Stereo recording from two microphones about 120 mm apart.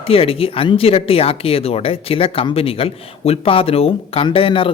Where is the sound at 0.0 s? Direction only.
50° left (ahead or behind).